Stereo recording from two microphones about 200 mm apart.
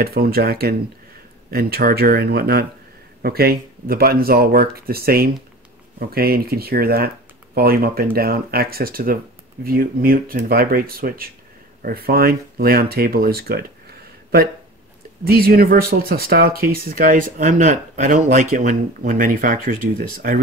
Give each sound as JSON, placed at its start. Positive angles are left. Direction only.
{"t": 0.0, "sound": "speech", "side_deg": -50}
{"t": 15.2, "sound": "speech", "side_deg": -50}